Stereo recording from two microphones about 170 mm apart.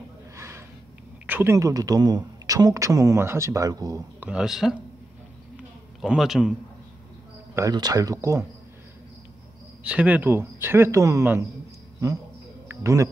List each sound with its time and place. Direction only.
0.4 s a sound: 15° right (ahead or behind)
1.2 s speech: 10° right (ahead or behind)
4.3 s a man's voice: 5° right (ahead or behind)
5.9 s a man's voice: centre (ahead or behind)
7.5 s speech: 20° right (ahead or behind)
9.8 s speech: 5° right (ahead or behind)
12.6 s speech: 20° right (ahead or behind)